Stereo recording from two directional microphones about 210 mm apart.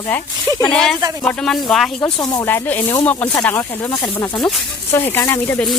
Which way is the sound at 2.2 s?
15° left (ahead or behind).